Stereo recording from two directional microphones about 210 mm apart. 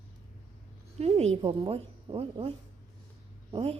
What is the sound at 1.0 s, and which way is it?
A woman's voice, 30° right (ahead or behind).